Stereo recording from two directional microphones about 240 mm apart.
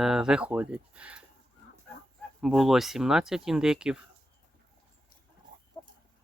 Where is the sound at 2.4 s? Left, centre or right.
Centre.